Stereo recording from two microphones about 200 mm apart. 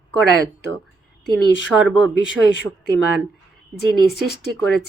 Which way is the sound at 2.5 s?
65° left (ahead or behind).